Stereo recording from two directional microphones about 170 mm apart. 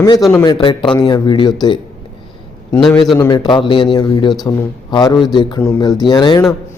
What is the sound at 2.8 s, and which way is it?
Speech, centre (ahead or behind).